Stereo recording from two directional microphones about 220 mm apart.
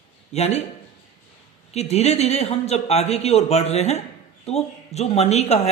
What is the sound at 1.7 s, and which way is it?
A man's voice, 30° left (ahead or behind).